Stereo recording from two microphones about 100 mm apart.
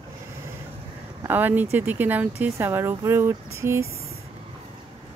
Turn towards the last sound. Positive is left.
turn(degrees=-30)  # may be behind; listen again after turning